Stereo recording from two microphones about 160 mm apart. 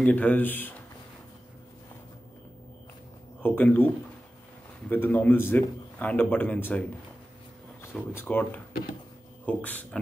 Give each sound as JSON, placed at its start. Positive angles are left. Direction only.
{"t": 0.0, "sound": "a man's voice", "side_deg": 10}
{"t": 3.4, "sound": "a man's voice", "side_deg": 10}
{"t": 7.8, "sound": "a man's voice", "side_deg": 15}